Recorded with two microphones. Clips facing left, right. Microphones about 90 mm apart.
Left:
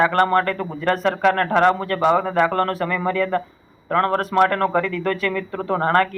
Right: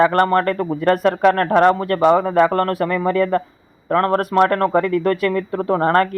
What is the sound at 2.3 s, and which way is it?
Speech, 35° right (ahead or behind).